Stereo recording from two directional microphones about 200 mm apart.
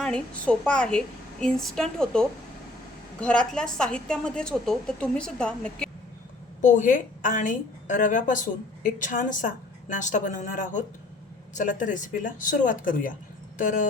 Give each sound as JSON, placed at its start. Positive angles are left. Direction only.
{"t": 0.0, "sound": "a woman's voice", "side_deg": 5}
{"t": 6.6, "sound": "a woman's voice", "side_deg": 40}